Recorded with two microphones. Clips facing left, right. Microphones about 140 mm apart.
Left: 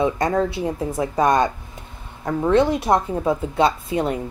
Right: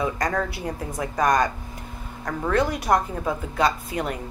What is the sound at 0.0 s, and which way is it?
Speech, 25° left (ahead or behind).